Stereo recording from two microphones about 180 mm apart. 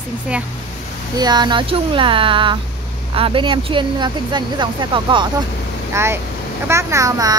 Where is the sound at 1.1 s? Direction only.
20° right (ahead or behind).